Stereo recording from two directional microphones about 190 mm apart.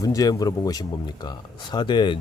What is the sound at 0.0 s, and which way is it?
Speech, 20° left (ahead or behind).